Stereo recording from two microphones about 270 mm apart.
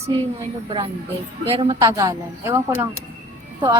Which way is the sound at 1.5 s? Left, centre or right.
Centre.